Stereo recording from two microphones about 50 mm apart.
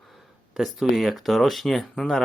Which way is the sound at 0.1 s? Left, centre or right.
Centre.